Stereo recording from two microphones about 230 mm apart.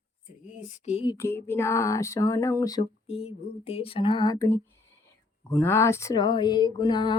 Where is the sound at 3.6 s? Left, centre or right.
Left.